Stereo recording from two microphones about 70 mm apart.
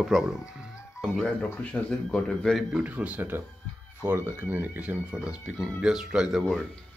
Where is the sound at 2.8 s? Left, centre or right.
Right.